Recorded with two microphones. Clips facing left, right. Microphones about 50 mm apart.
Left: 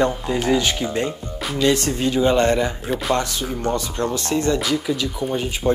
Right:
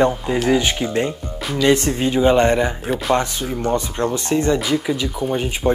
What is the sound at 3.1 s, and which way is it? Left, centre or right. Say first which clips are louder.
Speech: right 5 dB; right.